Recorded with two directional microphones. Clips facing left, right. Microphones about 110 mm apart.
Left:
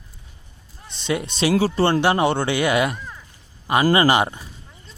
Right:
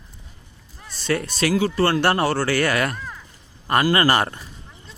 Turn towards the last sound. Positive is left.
turn(degrees=15)  # may be behind; listen again after turning